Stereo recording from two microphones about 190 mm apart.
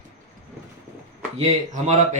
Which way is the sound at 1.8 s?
40° right (ahead or behind).